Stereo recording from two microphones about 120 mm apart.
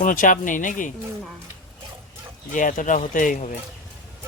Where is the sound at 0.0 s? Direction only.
90° left.